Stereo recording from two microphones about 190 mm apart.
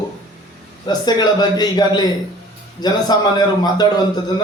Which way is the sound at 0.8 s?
20° left (ahead or behind).